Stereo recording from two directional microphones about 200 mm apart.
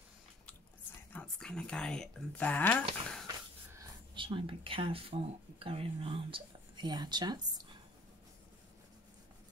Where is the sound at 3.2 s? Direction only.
20° right (ahead or behind).